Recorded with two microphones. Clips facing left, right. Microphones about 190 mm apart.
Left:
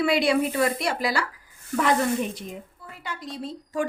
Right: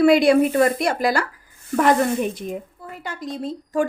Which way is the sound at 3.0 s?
45° right (ahead or behind).